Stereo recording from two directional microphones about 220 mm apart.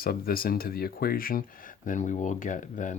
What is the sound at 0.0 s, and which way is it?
Speech, 40° left (ahead or behind).